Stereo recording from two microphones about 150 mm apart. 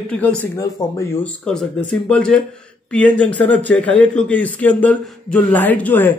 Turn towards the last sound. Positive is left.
turn(degrees=10)  # may be behind; listen again after turning